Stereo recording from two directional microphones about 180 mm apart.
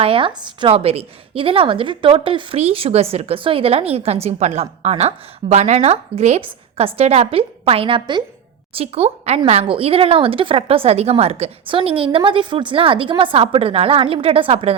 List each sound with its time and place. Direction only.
0.0 s a woman's voice: 30° right (ahead or behind)